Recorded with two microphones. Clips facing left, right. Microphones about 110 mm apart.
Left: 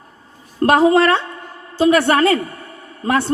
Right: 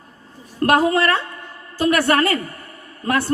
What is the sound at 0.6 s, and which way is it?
Speech, 25° left (ahead or behind).